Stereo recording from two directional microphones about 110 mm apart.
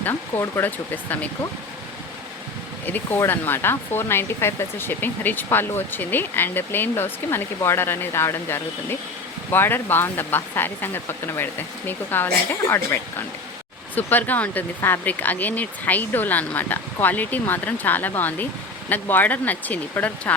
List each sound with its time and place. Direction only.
0.0 s speech: 20° left (ahead or behind)
2.8 s speech: 15° left (ahead or behind)